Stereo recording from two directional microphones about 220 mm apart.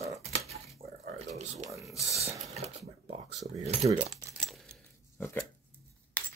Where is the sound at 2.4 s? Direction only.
30° right (ahead or behind).